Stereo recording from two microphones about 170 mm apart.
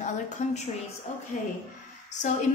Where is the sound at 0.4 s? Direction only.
45° left (ahead or behind).